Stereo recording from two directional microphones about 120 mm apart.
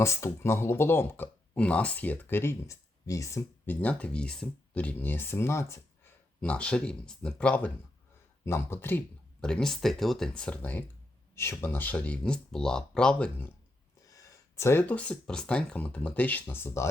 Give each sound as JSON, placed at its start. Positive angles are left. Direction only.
{"t": 0.0, "sound": "speech", "side_deg": 20}
{"t": 3.7, "sound": "speech", "side_deg": 10}
{"t": 6.4, "sound": "speech", "side_deg": 10}
{"t": 9.4, "sound": "speech", "side_deg": 5}
{"t": 14.0, "sound": "speech", "side_deg": 30}